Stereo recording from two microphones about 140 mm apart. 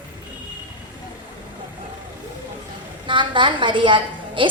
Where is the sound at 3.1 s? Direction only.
35° right (ahead or behind).